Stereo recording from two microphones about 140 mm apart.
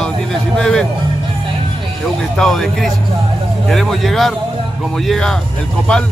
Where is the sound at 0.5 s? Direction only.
5° left (ahead or behind).